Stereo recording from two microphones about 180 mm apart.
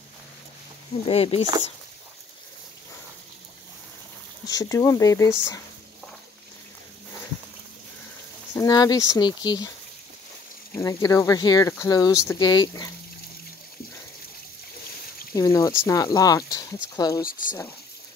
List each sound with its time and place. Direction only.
1.0 s speech: 30° left (ahead or behind)
4.5 s speech: 20° left (ahead or behind)
8.5 s speech: 20° left (ahead or behind)
10.8 s speech: 20° left (ahead or behind)
15.3 s speech: 15° left (ahead or behind)
17.2 s speech: 50° left (ahead or behind)